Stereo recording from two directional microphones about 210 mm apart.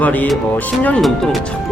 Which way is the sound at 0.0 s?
10° left (ahead or behind).